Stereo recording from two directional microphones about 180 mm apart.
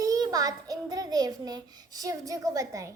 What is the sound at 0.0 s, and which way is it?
A child's voice, 20° right (ahead or behind).